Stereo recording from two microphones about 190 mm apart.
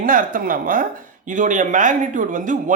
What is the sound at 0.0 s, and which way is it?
A man's voice, 45° right (ahead or behind).